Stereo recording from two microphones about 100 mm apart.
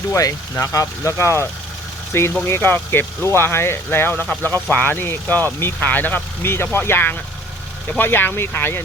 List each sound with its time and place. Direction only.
0.1 s speech: 30° left (ahead or behind)